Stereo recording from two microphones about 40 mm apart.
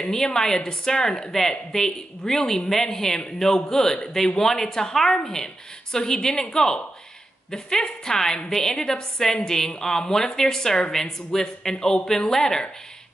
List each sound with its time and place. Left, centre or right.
0.1 s a woman's voice: centre